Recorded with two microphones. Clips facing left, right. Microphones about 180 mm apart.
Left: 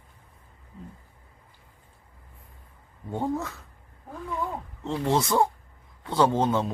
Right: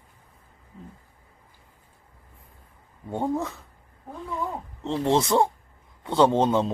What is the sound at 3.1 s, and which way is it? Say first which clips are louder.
Speech: right 2 dB; 15° right (ahead or behind).